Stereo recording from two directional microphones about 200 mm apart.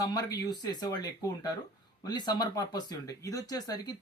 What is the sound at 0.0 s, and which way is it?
Speech, 20° left (ahead or behind).